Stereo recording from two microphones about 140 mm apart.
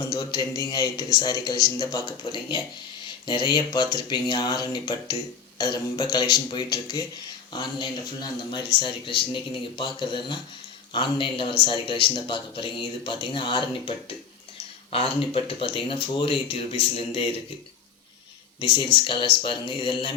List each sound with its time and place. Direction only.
0.0 s a man's voice: 30° left (ahead or behind)
18.6 s a man's voice: 35° left (ahead or behind)